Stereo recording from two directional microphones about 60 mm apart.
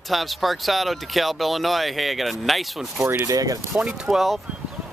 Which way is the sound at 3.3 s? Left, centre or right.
Right.